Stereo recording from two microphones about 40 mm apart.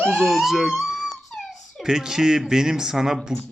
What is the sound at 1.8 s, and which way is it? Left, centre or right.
Speech, centre.